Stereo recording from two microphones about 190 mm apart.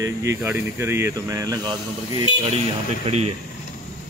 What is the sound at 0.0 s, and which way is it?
Speech, 15° right (ahead or behind).